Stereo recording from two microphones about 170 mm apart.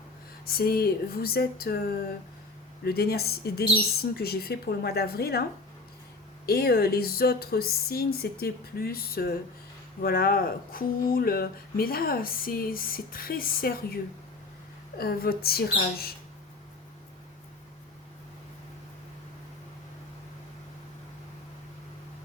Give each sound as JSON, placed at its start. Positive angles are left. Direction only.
{"t": 0.4, "sound": "a woman's voice", "side_deg": 65}
{"t": 6.4, "sound": "speech", "side_deg": 65}